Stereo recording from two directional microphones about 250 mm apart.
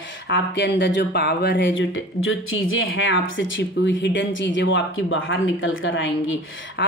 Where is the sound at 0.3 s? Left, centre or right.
Left.